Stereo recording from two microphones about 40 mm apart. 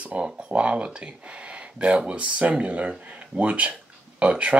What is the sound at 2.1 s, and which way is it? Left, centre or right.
Speech, right.